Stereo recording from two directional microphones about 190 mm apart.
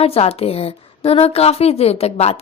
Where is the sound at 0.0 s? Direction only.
30° left (ahead or behind).